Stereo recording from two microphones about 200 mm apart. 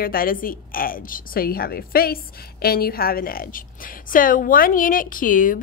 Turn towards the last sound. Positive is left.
turn(degrees=45)  # may be behind; listen again after turning